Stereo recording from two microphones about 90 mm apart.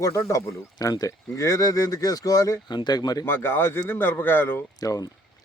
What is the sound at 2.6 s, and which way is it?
Speech, 55° left (ahead or behind).